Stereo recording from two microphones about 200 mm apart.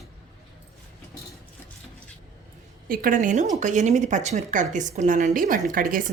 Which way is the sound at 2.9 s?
45° right (ahead or behind).